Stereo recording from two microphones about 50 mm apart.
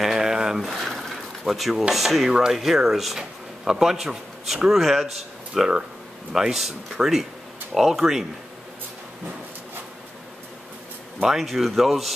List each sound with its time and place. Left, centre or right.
0.0 s a sound: centre
1.4 s speech: centre
5.5 s speech: centre
11.2 s speech: centre